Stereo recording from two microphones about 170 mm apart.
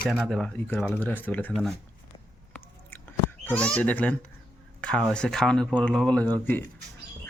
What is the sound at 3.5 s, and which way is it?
Speech, 5° left (ahead or behind).